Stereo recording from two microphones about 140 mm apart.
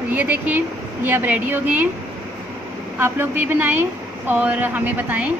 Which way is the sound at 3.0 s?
15° right (ahead or behind).